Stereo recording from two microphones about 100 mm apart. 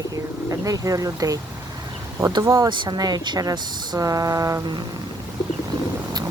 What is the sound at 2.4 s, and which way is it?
Speech, 30° right (ahead or behind).